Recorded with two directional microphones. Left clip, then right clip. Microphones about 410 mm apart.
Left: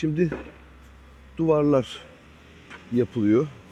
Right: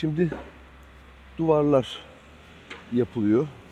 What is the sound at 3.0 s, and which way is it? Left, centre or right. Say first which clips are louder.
Speech: left 2 dB; centre.